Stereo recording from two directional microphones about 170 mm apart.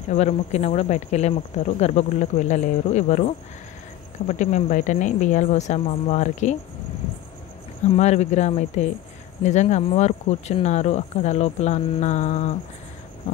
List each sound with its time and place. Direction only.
0.1 s speech: 40° left (ahead or behind)
7.9 s speech: 40° left (ahead or behind)